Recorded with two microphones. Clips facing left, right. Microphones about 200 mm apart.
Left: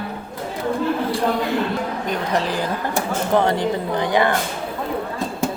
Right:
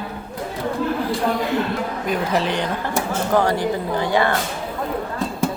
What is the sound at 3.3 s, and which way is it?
Speech, 20° left (ahead or behind).